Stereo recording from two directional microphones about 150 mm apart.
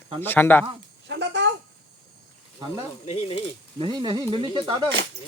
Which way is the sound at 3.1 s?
35° left (ahead or behind).